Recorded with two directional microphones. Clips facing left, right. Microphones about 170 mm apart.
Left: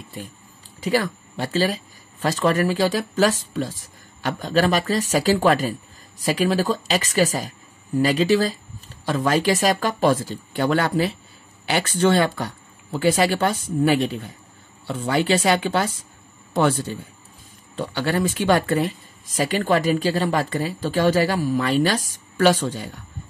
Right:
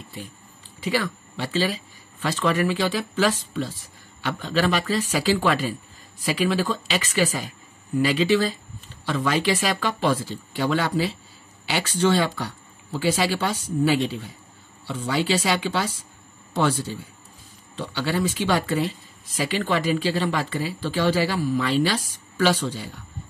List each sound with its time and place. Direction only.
0.7 s speech: 40° left (ahead or behind)